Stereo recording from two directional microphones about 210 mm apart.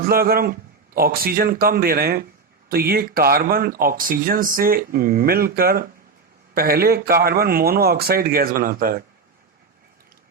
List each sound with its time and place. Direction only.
0.0 s speech: 45° right (ahead or behind)